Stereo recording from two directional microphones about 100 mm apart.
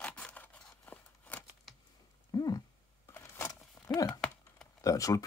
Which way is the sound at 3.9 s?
40° left (ahead or behind).